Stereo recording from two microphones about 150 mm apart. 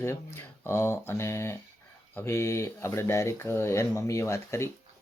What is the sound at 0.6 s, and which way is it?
Speech, 15° left (ahead or behind).